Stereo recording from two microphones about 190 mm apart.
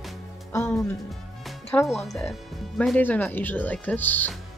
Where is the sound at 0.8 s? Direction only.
Centre (ahead or behind).